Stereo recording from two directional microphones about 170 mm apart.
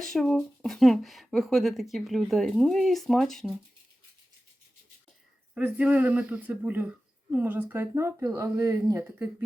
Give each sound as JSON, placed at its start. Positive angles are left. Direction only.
{"t": 0.0, "sound": "speech", "side_deg": 0}
{"t": 5.5, "sound": "speech", "side_deg": -10}